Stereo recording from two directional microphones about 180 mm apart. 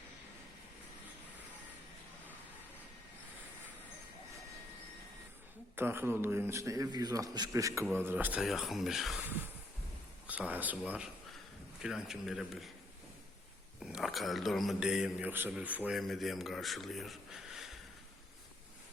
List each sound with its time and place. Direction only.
5.7 s a man's voice: 10° right (ahead or behind)
10.2 s a man's voice: 10° right (ahead or behind)
13.8 s a man's voice: centre (ahead or behind)